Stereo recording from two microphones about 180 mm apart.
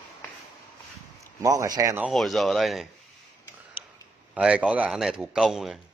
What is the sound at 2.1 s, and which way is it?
Speech, centre (ahead or behind).